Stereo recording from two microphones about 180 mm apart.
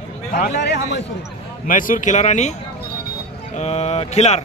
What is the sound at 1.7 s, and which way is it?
Speech, 50° left (ahead or behind).